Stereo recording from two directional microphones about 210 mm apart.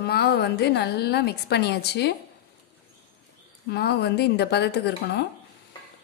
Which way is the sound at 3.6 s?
50° left (ahead or behind).